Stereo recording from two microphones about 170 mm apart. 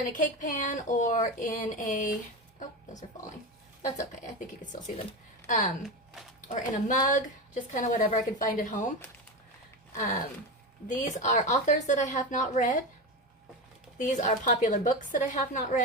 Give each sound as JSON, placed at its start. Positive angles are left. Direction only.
{"t": 0.1, "sound": "a woman's voice", "side_deg": 50}
{"t": 3.9, "sound": "a woman's voice", "side_deg": 45}
{"t": 10.8, "sound": "a woman's voice", "side_deg": 45}
{"t": 14.0, "sound": "a woman's voice", "side_deg": 45}